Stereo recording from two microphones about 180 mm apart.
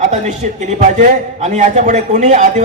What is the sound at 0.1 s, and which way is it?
A man's voice, 40° right (ahead or behind).